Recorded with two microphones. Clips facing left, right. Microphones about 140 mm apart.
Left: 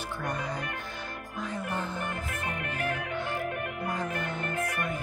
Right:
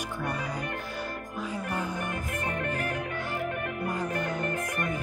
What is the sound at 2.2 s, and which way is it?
Music, 40° right (ahead or behind).